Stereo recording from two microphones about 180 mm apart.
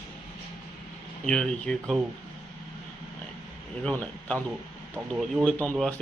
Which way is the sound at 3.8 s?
5° left (ahead or behind).